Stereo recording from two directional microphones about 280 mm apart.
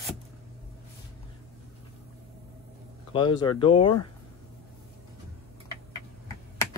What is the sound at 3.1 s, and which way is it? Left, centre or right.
Speech, centre.